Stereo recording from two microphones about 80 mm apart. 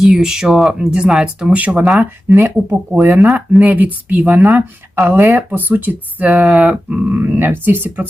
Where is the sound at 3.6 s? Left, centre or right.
Right.